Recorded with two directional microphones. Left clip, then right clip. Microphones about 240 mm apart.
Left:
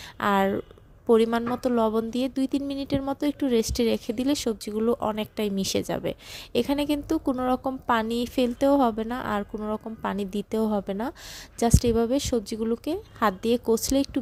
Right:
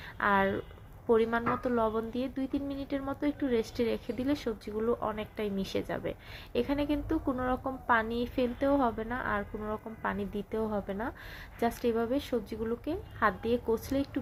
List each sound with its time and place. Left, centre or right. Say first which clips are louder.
0.2 s a woman's voice: left 4 dB; left